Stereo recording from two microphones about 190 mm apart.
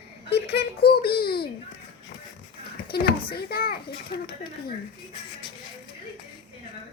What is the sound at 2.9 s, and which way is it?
Speech, 55° left (ahead or behind).